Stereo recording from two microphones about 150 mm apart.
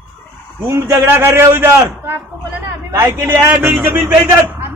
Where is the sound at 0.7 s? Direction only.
15° right (ahead or behind).